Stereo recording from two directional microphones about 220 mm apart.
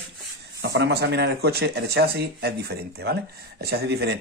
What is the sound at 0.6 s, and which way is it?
Speech, 50° right (ahead or behind).